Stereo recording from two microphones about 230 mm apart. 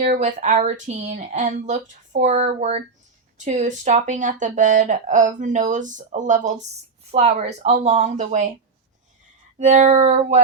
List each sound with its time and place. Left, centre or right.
0.0 s speech: right
9.6 s speech: right